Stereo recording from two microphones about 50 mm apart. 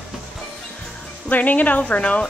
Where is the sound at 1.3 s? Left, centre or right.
Left.